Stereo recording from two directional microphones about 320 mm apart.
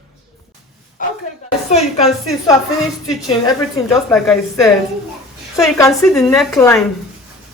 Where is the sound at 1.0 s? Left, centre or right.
Left.